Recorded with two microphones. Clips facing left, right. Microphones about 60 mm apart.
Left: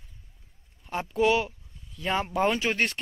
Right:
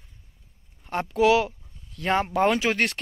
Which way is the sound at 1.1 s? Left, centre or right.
Right.